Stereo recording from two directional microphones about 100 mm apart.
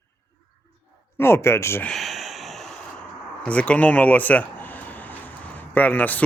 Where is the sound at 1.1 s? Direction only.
25° left (ahead or behind).